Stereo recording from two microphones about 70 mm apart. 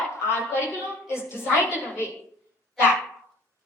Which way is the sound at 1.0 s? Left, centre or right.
Left.